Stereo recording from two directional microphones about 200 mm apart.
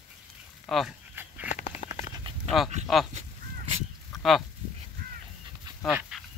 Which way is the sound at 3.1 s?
30° right (ahead or behind).